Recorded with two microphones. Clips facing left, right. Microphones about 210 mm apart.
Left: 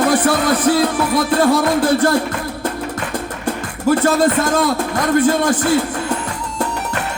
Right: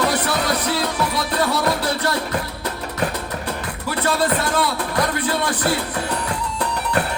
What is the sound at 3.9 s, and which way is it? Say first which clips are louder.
A man's voice: left 7 dB; 45° left (ahead or behind).